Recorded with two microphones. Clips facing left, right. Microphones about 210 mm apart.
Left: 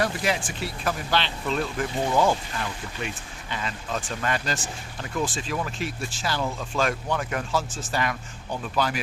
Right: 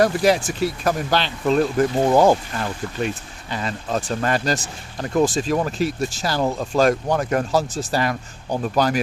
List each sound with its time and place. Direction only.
0.0 s speech: 40° right (ahead or behind)